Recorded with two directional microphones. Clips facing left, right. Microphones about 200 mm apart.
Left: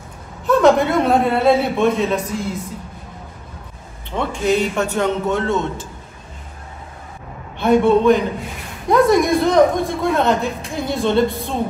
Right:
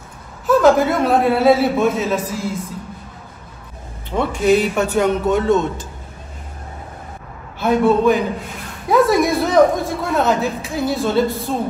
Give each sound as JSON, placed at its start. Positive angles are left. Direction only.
{"t": 0.5, "sound": "a man's voice", "side_deg": 0}
{"t": 4.1, "sound": "a man's voice", "side_deg": -10}
{"t": 5.3, "sound": "a man's voice", "side_deg": -15}
{"t": 7.5, "sound": "a man's voice", "side_deg": 0}